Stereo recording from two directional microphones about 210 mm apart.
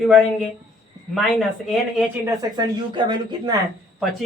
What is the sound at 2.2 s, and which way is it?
Speech, 20° right (ahead or behind).